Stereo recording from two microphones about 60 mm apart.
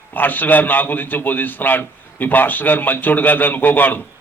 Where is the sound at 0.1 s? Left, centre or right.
Left.